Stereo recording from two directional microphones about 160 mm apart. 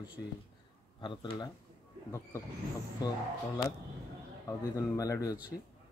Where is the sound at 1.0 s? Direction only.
30° left (ahead or behind).